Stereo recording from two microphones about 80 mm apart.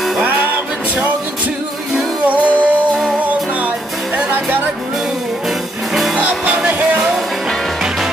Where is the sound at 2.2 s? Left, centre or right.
Centre.